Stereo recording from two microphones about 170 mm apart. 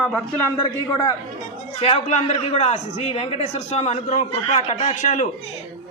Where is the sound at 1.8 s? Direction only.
40° left (ahead or behind).